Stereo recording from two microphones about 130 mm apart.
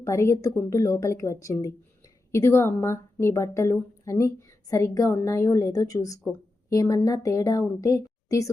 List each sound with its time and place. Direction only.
0.0 s a woman's voice: 20° left (ahead or behind)